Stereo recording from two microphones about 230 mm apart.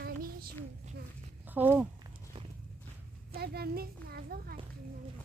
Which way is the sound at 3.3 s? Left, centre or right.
Right.